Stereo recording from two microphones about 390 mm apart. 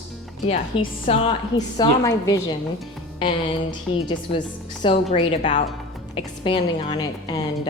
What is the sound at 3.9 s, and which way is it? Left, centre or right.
A woman's voice, centre.